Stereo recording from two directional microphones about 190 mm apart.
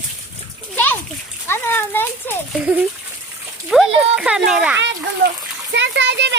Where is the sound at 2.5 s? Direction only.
5° right (ahead or behind).